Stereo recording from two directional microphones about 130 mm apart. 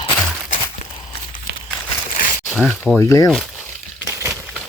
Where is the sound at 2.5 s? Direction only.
10° left (ahead or behind).